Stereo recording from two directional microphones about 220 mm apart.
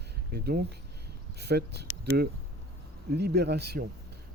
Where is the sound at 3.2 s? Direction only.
50° right (ahead or behind).